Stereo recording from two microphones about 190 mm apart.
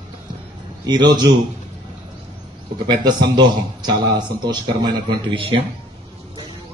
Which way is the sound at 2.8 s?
25° right (ahead or behind).